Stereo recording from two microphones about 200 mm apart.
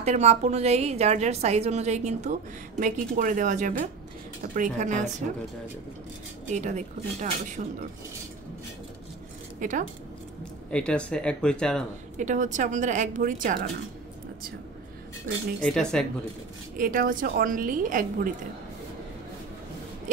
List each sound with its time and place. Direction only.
0.0 s a woman's voice: 35° right (ahead or behind)
6.5 s a woman's voice: 35° right (ahead or behind)
9.6 s speech: 40° right (ahead or behind)
10.7 s speech: 5° left (ahead or behind)
12.2 s a woman's voice: 40° right (ahead or behind)
15.6 s speech: 5° left (ahead or behind)
16.7 s a woman's voice: 45° right (ahead or behind)